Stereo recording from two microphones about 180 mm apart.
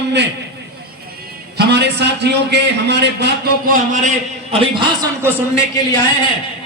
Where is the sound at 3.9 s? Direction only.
35° right (ahead or behind).